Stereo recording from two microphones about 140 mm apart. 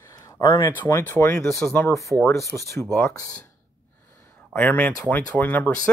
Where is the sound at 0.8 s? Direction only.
15° left (ahead or behind).